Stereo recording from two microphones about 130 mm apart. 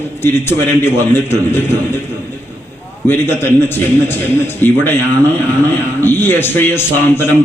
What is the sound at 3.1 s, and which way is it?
A man's voice, 15° left (ahead or behind).